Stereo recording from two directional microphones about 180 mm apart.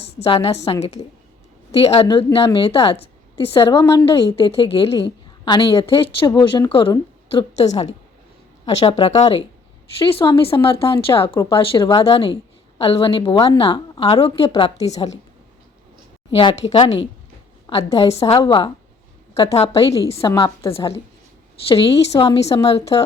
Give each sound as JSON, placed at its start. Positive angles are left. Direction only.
{"t": 0.0, "sound": "a woman's voice", "side_deg": 35}
{"t": 16.3, "sound": "a woman's voice", "side_deg": 30}
{"t": 20.7, "sound": "a woman's voice", "side_deg": 30}
{"t": 22.4, "sound": "a woman's voice", "side_deg": 35}